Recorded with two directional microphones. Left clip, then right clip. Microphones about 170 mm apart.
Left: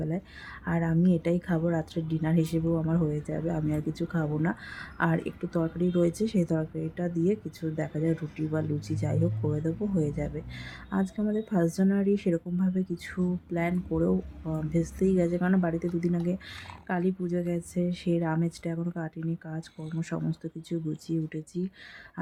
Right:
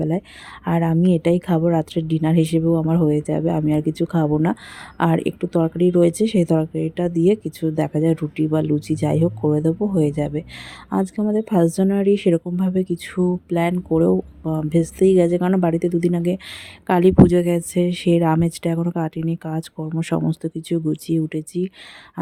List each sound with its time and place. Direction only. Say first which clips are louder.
0.6 s a woman's voice: right 9 dB; 45° right (ahead or behind)
16.8 s a woman's voice: right 17 dB; 60° right (ahead or behind)